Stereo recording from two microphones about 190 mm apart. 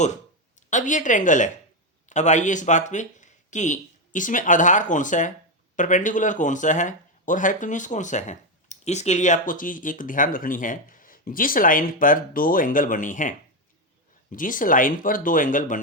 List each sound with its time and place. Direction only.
0.7 s speech: 40° left (ahead or behind)